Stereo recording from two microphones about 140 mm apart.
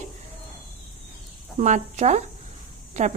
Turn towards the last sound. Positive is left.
turn(degrees=-55)  # may be behind; listen again after turning